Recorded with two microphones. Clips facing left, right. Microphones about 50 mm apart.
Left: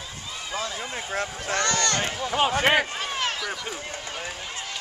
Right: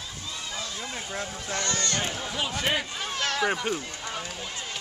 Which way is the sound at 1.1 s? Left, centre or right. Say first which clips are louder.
Left 6 dB; left.